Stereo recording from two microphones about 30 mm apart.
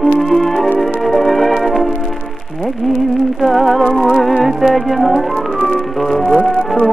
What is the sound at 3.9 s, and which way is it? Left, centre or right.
Music, left.